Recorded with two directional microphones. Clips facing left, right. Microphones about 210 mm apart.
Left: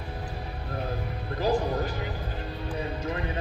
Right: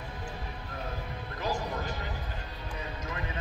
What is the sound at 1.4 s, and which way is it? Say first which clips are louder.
Music: left 8 dB; 35° left (ahead or behind).